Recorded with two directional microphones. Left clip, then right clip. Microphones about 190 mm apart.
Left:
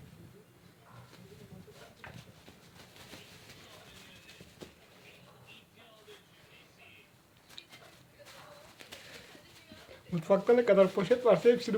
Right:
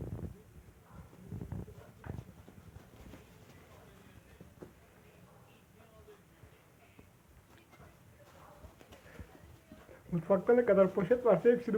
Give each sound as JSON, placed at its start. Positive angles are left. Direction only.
{"t": 10.1, "sound": "speech", "side_deg": 15}